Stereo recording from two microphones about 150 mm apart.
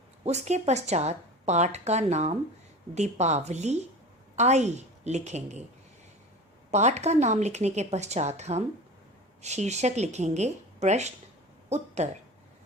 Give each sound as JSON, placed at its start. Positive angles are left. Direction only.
{"t": 0.3, "sound": "a woman's voice", "side_deg": -50}
{"t": 6.7, "sound": "a woman's voice", "side_deg": -50}